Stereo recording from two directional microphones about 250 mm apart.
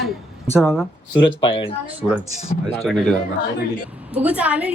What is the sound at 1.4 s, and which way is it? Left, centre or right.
Speech, left.